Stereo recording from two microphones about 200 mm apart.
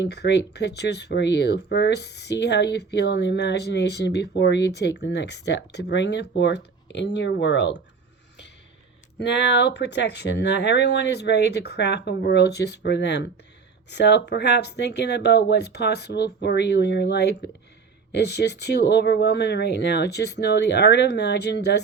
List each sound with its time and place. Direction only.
0.0 s speech: 55° left (ahead or behind)
9.1 s speech: 60° left (ahead or behind)